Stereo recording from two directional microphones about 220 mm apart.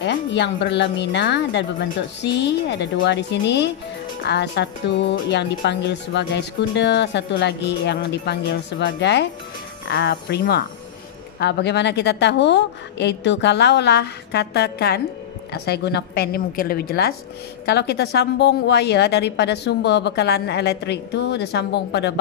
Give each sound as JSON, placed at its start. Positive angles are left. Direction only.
{"t": 0.0, "sound": "speech", "side_deg": 50}